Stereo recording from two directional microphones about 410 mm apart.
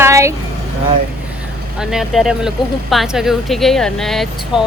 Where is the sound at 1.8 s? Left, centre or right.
Centre.